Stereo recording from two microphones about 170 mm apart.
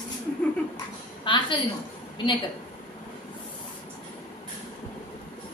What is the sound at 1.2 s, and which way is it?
Speech, 30° left (ahead or behind).